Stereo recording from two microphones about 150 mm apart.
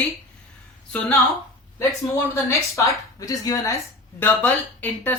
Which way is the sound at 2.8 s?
20° left (ahead or behind).